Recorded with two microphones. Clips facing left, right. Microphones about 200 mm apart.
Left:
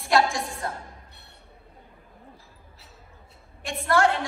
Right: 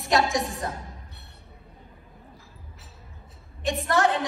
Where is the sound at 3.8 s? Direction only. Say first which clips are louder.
Left 2 dB; 20° right (ahead or behind).